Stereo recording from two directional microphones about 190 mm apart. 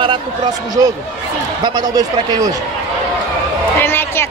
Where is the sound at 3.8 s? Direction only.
10° left (ahead or behind).